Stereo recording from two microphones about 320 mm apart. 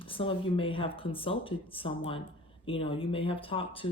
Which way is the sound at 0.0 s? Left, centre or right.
Centre.